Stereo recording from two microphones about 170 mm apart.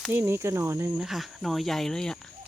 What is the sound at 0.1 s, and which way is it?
Speech, 15° right (ahead or behind).